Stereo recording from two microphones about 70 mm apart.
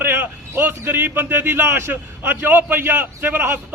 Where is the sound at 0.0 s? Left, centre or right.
Right.